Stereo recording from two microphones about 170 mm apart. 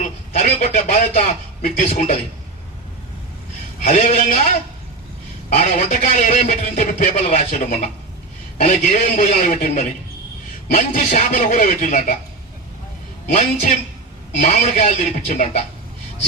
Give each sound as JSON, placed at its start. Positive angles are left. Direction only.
{"t": 0.0, "sound": "a man's voice", "side_deg": 45}
{"t": 3.8, "sound": "speech", "side_deg": 55}
{"t": 5.8, "sound": "speech", "side_deg": 50}
{"t": 13.3, "sound": "speech", "side_deg": 45}